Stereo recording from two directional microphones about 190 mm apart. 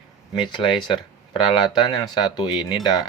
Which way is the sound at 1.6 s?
25° left (ahead or behind).